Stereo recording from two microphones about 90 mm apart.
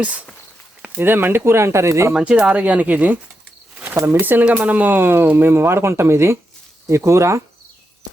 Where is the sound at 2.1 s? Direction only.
10° right (ahead or behind); by 7.4 s 30° right (ahead or behind).